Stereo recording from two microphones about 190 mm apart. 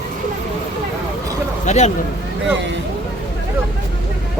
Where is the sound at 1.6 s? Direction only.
35° left (ahead or behind).